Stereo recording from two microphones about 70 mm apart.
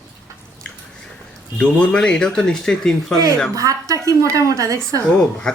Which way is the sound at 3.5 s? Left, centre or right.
Right.